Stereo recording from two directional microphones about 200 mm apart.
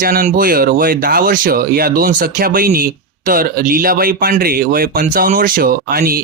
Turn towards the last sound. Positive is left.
turn(degrees=-45)  # may be behind; listen again after turning